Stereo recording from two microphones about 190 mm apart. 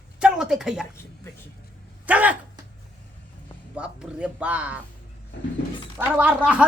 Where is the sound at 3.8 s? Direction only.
5° right (ahead or behind).